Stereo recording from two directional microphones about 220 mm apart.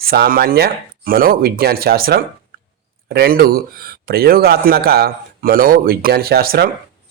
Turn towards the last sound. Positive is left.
turn(degrees=-40)  # may be behind; listen again after turning